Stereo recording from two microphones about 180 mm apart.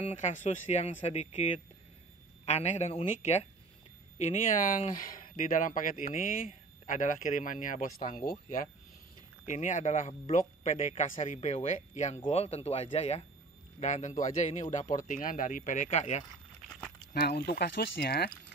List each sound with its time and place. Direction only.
0.0 s speech: 40° left (ahead or behind)
17.1 s speech: 60° left (ahead or behind)